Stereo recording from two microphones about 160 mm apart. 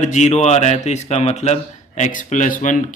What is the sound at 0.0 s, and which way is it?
Speech, 50° left (ahead or behind).